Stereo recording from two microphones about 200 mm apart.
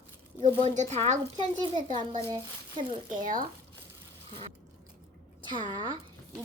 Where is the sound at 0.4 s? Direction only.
35° right (ahead or behind).